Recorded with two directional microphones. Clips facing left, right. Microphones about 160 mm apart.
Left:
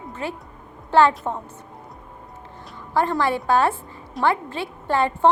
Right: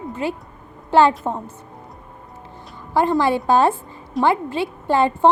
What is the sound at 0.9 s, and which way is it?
Speech, 15° right (ahead or behind).